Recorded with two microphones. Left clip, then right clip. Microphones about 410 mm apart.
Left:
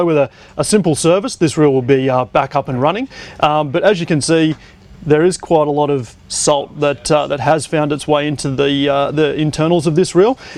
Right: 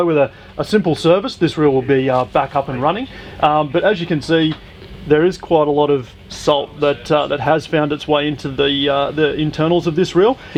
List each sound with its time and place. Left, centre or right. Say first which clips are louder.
0.0 s speech: left 1 dB; left